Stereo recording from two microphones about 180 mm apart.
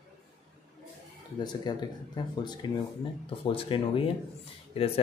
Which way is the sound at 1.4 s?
25° left (ahead or behind).